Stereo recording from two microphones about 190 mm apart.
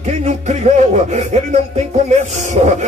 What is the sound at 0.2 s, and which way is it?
Music, 35° right (ahead or behind).